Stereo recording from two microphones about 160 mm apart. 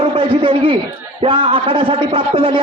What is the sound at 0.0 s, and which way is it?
A man's voice, 35° right (ahead or behind).